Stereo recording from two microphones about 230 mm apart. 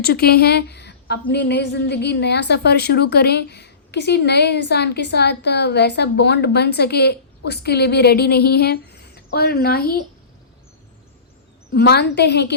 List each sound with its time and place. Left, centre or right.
0.0 s a woman's voice: left
11.7 s a woman's voice: left